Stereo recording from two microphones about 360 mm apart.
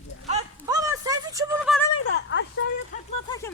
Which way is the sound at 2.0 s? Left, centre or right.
Left.